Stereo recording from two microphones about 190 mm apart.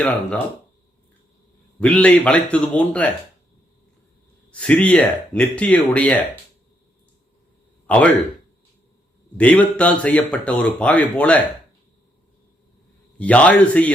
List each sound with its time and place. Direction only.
0.0 s a man's voice: 5° left (ahead or behind)
1.8 s a man's voice: 5° left (ahead or behind)
4.6 s a man's voice: 5° left (ahead or behind)
7.9 s speech: 5° left (ahead or behind)
9.4 s a man's voice: 5° left (ahead or behind)
13.1 s a man's voice: 5° left (ahead or behind)